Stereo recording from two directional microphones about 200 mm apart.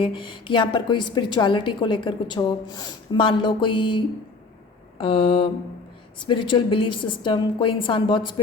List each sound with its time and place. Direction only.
0.0 s a woman's voice: 25° left (ahead or behind)